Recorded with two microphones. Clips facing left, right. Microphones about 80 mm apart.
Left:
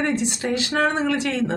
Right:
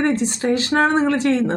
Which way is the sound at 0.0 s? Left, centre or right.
Right.